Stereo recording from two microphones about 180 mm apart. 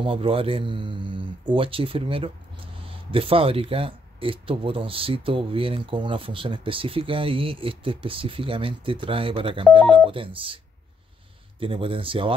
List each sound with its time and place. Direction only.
0.0 s speech: 30° right (ahead or behind)
11.6 s speech: 30° right (ahead or behind)